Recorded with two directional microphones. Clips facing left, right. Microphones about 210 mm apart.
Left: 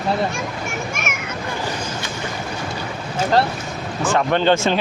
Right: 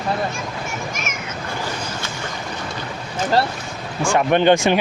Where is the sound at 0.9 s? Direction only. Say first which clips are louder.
Left 2 dB; 65° left (ahead or behind).